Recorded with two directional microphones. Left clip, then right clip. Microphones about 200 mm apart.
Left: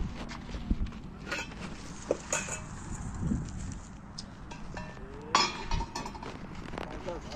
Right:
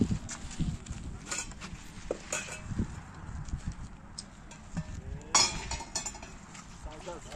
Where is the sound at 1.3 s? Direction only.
60° right (ahead or behind).